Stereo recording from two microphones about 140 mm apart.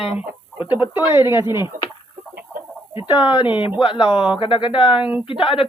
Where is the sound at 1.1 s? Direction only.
30° left (ahead or behind).